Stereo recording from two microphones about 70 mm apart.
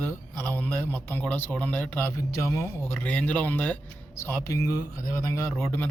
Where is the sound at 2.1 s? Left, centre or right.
Left.